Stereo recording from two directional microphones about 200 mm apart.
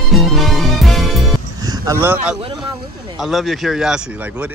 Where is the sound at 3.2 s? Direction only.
Centre (ahead or behind).